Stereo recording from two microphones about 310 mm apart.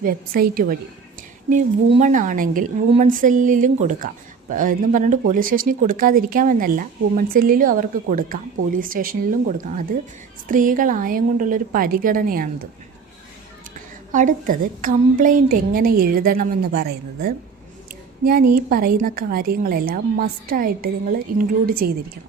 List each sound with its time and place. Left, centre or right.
0.0 s a woman's voice: right
14.1 s a woman's voice: right